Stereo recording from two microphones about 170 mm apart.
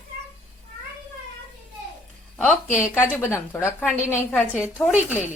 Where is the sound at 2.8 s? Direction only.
10° left (ahead or behind).